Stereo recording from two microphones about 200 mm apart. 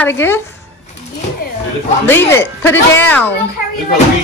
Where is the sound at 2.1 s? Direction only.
10° left (ahead or behind).